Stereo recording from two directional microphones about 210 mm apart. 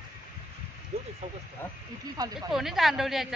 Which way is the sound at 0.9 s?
30° right (ahead or behind).